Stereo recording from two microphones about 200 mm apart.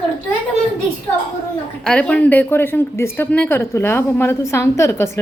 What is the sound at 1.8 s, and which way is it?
Speech, 5° left (ahead or behind).